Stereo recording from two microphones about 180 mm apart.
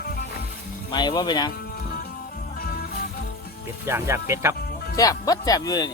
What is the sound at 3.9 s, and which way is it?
Speech, 15° right (ahead or behind).